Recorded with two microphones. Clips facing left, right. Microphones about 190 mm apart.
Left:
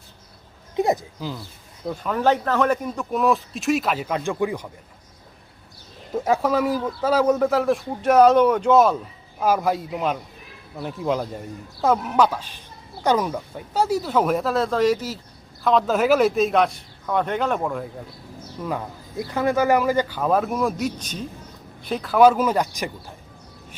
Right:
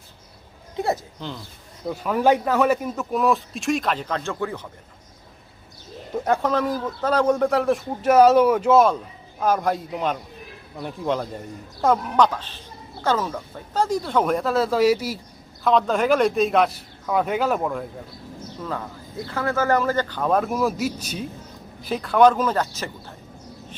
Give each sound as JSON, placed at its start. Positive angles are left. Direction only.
{"t": 1.2, "sound": "speech", "side_deg": 5}
{"t": 1.9, "sound": "speech", "side_deg": -10}
{"t": 6.1, "sound": "speech", "side_deg": 5}
{"t": 15.6, "sound": "speech", "side_deg": 0}
{"t": 18.6, "sound": "speech", "side_deg": 15}